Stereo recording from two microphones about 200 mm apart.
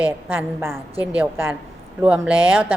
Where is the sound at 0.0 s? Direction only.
10° right (ahead or behind).